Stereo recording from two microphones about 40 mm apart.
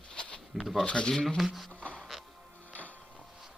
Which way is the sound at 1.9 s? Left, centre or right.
Centre.